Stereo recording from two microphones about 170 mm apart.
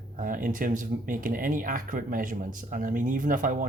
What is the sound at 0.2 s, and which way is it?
Speech, 55° right (ahead or behind).